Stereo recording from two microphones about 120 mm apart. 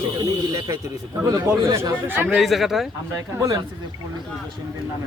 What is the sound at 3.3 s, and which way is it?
Speech, 30° right (ahead or behind).